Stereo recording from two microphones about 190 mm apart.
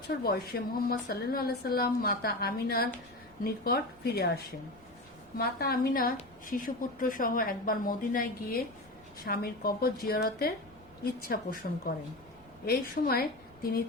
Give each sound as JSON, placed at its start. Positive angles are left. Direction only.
{"t": 0.2, "sound": "a woman's voice", "side_deg": 55}